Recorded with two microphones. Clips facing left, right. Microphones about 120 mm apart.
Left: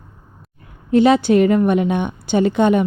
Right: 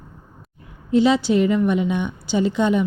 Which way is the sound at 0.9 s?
55° left (ahead or behind).